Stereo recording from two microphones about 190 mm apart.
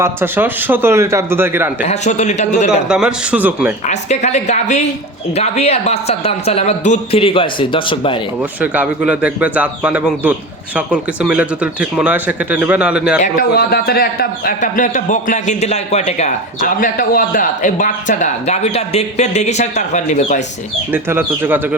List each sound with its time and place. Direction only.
0.0 s speech: 10° right (ahead or behind)
1.9 s speech: 35° left (ahead or behind)
2.9 s speech: 5° right (ahead or behind)
3.8 s speech: 35° left (ahead or behind)
8.6 s speech: 10° right (ahead or behind)
13.2 s speech: 50° left (ahead or behind)
16.8 s speech: 45° left (ahead or behind)
20.9 s speech: 10° right (ahead or behind)